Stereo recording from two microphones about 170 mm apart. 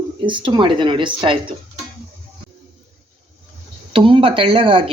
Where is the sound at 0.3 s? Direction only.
30° right (ahead or behind).